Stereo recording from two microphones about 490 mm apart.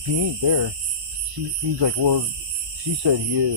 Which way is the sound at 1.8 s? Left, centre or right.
Right.